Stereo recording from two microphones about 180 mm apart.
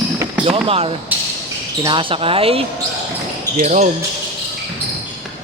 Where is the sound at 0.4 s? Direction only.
30° right (ahead or behind).